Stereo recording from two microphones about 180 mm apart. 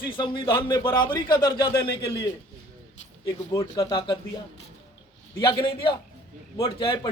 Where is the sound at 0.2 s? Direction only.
25° left (ahead or behind).